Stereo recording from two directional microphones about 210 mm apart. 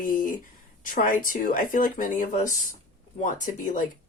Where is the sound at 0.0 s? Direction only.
40° left (ahead or behind).